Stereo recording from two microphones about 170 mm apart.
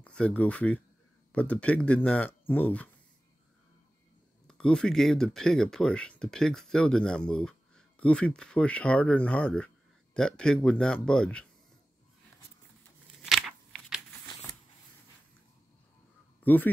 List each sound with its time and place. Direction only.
0.0 s speech: 5° left (ahead or behind)
4.5 s speech: 5° left (ahead or behind)
13.2 s a sound: centre (ahead or behind)
14.2 s shuffling cards: 25° left (ahead or behind)
16.4 s speech: 10° left (ahead or behind)